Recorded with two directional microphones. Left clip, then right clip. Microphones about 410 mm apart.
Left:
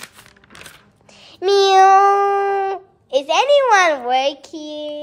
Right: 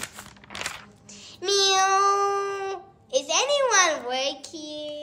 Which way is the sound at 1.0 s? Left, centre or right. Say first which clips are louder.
Left 9 dB; centre.